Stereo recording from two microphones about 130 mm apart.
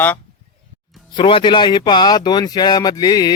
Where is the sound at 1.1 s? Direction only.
40° left (ahead or behind).